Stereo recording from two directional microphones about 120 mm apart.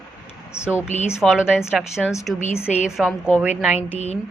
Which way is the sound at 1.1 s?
5° right (ahead or behind).